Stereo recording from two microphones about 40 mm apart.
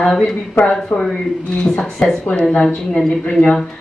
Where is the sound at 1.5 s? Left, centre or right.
Left.